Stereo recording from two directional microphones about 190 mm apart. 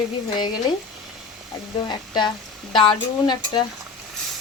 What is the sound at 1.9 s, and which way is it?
Speech, 25° left (ahead or behind).